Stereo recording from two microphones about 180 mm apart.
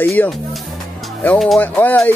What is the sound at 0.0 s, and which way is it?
Speech, 10° left (ahead or behind).